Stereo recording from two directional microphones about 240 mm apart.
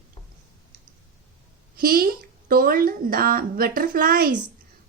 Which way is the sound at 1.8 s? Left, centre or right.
Right.